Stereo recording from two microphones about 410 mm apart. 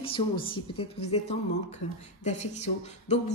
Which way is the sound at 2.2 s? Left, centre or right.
Centre.